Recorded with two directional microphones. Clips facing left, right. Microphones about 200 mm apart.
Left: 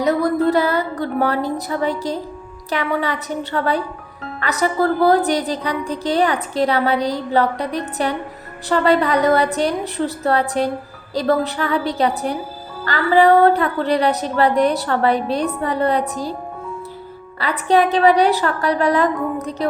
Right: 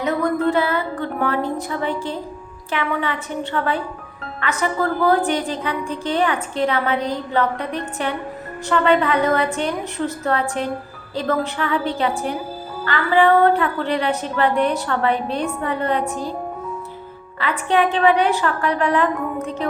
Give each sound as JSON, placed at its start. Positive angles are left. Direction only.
{"t": 0.0, "sound": "a sound", "side_deg": 35}
{"t": 2.6, "sound": "a woman's voice", "side_deg": 40}
{"t": 17.4, "sound": "a woman's voice", "side_deg": 35}